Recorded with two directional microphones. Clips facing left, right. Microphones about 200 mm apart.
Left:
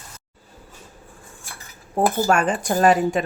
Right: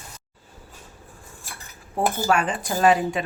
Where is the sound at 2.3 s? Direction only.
45° left (ahead or behind).